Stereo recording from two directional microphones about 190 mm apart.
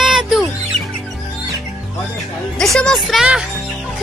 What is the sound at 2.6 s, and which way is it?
Speech, centre (ahead or behind).